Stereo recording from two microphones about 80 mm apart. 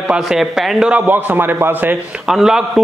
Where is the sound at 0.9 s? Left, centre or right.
Right.